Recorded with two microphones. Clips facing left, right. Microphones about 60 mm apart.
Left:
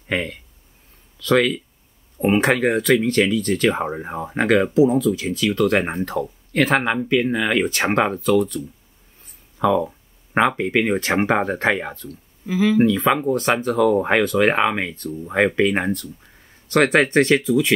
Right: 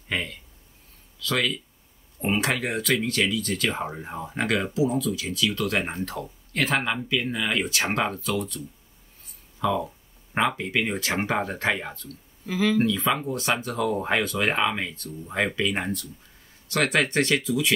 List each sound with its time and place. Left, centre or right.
0.1 s speech: left
2.1 s speech: left
9.2 s a sound: left
9.8 s speech: left
12.4 s speech: centre
12.8 s speech: left